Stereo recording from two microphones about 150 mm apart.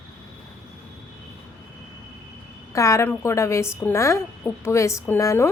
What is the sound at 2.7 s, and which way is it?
A woman's voice, 20° left (ahead or behind).